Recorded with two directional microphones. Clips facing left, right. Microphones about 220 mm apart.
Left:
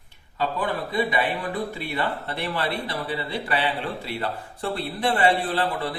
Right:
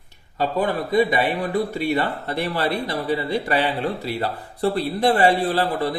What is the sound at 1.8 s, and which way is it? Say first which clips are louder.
Speech: right 6 dB; 45° right (ahead or behind).